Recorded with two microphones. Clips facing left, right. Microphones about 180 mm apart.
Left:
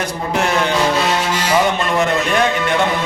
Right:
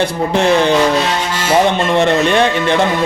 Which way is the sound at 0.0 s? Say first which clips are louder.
Right 5 dB; 30° right (ahead or behind).